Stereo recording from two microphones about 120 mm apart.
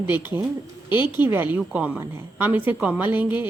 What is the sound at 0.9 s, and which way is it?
Speech, 40° left (ahead or behind).